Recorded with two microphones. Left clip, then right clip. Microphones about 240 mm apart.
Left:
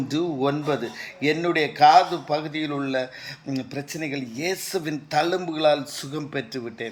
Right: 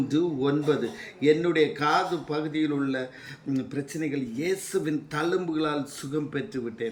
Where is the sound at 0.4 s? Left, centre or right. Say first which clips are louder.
Left 1 dB; centre.